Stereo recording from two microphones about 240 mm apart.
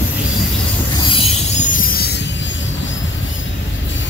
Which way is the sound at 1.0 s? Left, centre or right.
Left.